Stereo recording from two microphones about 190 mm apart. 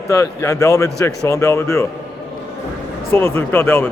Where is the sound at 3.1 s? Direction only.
10° left (ahead or behind).